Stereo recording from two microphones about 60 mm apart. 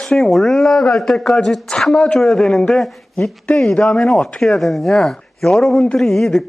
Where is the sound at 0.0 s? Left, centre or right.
Centre.